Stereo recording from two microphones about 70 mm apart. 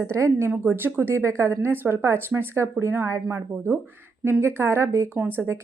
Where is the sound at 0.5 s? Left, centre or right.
Right.